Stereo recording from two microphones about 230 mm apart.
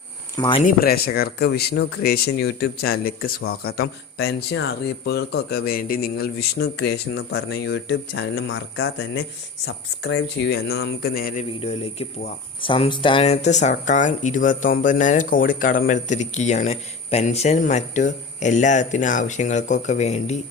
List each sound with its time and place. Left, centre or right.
0.3 s speech: centre
0.6 s speech: left
12.6 s speech: left